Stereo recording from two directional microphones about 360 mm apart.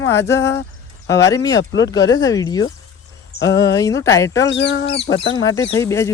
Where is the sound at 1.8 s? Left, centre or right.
Centre.